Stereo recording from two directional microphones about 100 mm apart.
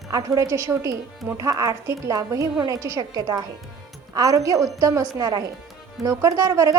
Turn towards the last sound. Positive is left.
turn(degrees=-35)  # may be behind; listen again after turning